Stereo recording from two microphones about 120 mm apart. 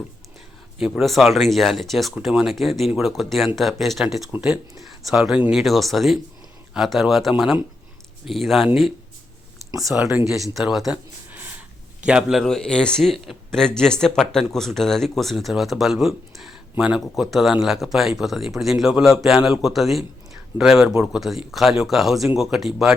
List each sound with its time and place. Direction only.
0.8 s a man's voice: 5° right (ahead or behind)
4.3 s a man's voice: 10° right (ahead or behind)
9.9 s speech: 15° right (ahead or behind)
10.5 s a man's voice: centre (ahead or behind)
12.0 s a man's voice: 5° right (ahead or behind)